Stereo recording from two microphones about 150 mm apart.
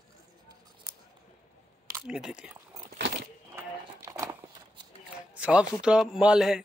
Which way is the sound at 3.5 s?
20° right (ahead or behind).